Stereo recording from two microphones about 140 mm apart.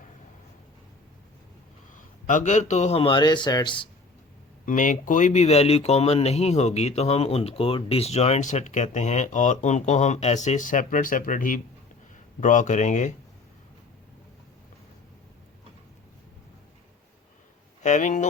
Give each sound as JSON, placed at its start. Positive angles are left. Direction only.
{"t": 2.2, "sound": "a man's voice", "side_deg": 60}
{"t": 4.6, "sound": "speech", "side_deg": 65}
{"t": 17.8, "sound": "speech", "side_deg": 60}